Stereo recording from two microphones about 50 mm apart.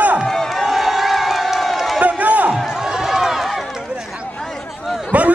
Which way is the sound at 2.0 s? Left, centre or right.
Right.